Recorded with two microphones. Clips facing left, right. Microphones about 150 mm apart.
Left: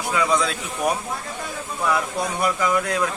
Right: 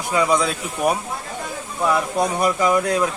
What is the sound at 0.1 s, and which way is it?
Speech, 35° right (ahead or behind).